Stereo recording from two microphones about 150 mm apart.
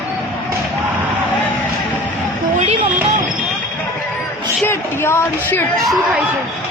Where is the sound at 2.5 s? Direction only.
45° right (ahead or behind).